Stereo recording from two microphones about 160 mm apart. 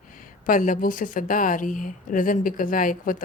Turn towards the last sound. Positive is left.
turn(degrees=60)  # may be behind; listen again after turning